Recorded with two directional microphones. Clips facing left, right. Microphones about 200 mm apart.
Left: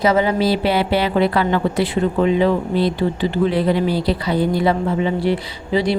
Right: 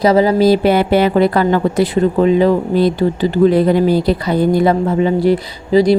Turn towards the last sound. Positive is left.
turn(degrees=-40)  # may be behind; listen again after turning